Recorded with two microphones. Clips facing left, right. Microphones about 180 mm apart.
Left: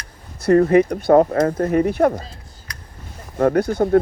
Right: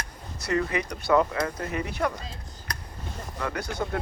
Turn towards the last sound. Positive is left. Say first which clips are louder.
# left 14 dB
turn(degrees=55)  # may be behind; listen again after turning